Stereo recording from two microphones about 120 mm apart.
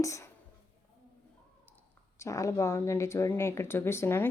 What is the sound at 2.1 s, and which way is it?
A woman's voice, 25° left (ahead or behind).